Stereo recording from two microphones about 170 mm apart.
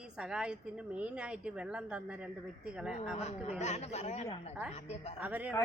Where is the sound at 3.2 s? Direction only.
40° left (ahead or behind).